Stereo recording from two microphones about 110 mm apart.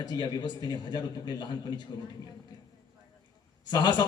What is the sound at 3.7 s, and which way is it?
Speech, 45° left (ahead or behind).